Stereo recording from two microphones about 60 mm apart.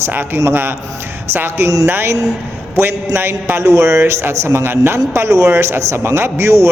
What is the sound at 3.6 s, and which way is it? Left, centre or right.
A man's voice, right.